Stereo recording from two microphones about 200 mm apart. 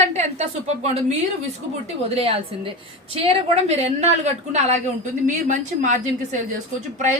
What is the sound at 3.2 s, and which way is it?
A woman's voice, 30° right (ahead or behind).